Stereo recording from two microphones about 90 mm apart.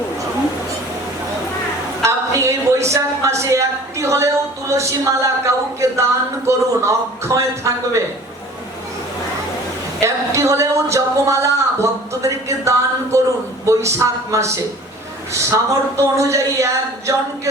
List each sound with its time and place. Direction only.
2.0 s a sound: 35° right (ahead or behind)
4.7 s speech: 35° right (ahead or behind)
10.0 s speech: 35° right (ahead or behind)